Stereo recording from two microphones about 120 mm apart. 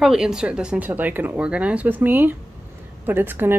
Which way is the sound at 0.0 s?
5° right (ahead or behind).